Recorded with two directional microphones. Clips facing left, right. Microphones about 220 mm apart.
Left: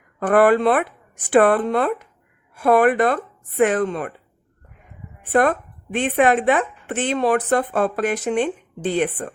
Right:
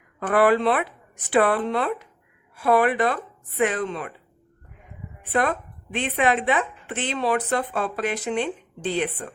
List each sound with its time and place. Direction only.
0.2 s a woman's voice: 50° left (ahead or behind)
5.2 s a woman's voice: 50° left (ahead or behind)